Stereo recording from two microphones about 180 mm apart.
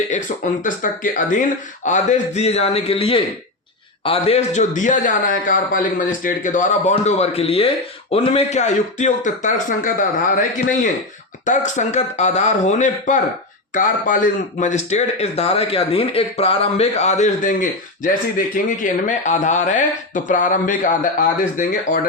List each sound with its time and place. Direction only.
0.1 s speech: 45° left (ahead or behind)
14.6 s speech: 40° left (ahead or behind)